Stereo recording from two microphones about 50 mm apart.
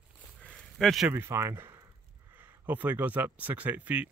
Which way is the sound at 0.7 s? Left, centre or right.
Centre.